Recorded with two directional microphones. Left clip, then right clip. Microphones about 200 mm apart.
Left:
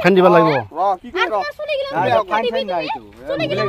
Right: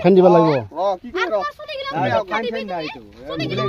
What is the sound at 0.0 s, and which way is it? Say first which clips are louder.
Speech: even; 35° right (ahead or behind).